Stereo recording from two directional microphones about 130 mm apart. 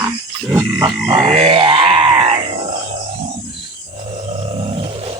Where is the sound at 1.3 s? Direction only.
45° right (ahead or behind).